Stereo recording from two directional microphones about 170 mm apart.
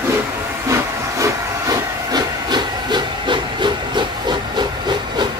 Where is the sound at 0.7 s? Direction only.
15° right (ahead or behind).